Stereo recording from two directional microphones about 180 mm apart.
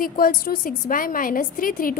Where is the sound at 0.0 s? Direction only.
50° left (ahead or behind).